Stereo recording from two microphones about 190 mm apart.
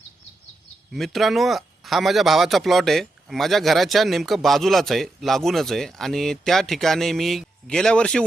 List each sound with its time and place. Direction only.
0.9 s speech: centre (ahead or behind)